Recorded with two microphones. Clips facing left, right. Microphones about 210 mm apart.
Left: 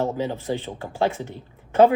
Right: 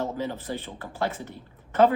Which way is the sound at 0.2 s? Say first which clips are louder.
Left 5 dB; 15° left (ahead or behind).